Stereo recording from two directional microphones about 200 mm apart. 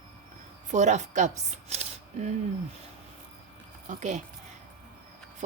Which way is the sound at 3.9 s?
35° right (ahead or behind).